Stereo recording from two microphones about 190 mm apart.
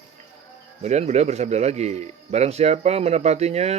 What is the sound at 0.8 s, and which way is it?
A man's voice, 35° right (ahead or behind).